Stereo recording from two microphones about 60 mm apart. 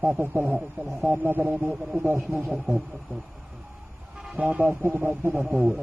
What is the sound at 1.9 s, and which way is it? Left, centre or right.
Speech, right.